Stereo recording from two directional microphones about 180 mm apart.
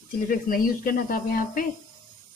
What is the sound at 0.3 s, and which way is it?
Speech, 50° left (ahead or behind).